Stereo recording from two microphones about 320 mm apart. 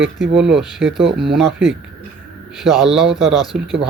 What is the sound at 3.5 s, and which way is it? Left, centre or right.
Speech, centre.